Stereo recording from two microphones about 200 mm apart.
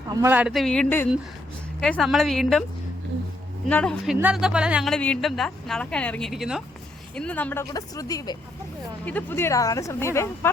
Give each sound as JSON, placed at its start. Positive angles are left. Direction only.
{"t": 0.1, "sound": "a woman's voice", "side_deg": -15}
{"t": 3.7, "sound": "a woman's voice", "side_deg": 5}